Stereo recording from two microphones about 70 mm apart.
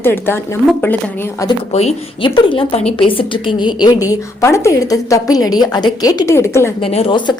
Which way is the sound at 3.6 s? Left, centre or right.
Left.